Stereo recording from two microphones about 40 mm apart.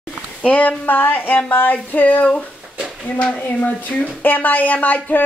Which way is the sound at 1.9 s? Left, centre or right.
Left.